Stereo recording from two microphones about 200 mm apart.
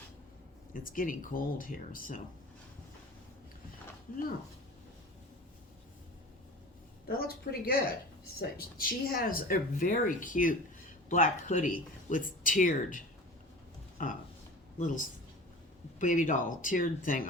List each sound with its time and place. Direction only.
0.7 s speech: 45° left (ahead or behind)
4.1 s speech: 45° left (ahead or behind)
7.1 s speech: 50° left (ahead or behind)
14.0 s speech: 40° left (ahead or behind)